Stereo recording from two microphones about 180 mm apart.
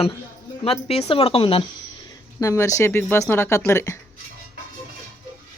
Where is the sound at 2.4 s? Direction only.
15° left (ahead or behind).